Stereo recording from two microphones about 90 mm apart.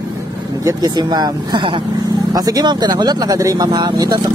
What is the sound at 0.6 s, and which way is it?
Speech, 40° right (ahead or behind).